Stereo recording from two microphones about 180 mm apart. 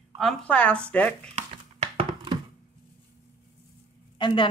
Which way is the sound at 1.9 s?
25° right (ahead or behind).